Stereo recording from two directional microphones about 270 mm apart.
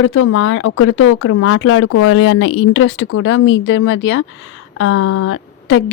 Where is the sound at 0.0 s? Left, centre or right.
Left.